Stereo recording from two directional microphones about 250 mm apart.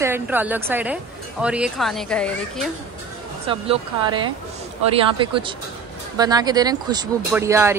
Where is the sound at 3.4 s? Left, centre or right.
Right.